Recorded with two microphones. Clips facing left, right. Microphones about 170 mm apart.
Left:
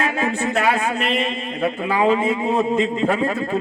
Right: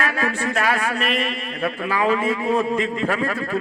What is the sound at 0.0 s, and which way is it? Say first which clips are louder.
A man's voice: left 2 dB; 25° left (ahead or behind).